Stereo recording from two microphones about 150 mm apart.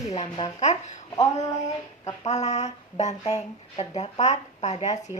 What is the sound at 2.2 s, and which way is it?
Speech, 50° left (ahead or behind).